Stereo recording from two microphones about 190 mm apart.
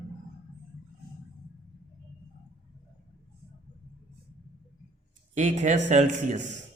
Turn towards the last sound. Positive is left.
turn(degrees=-40)  # may be behind; listen again after turning